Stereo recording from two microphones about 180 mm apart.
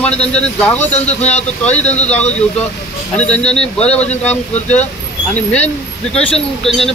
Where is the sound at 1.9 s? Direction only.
40° left (ahead or behind).